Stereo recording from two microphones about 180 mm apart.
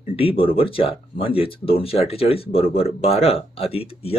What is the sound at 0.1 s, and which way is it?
Speech, 30° left (ahead or behind).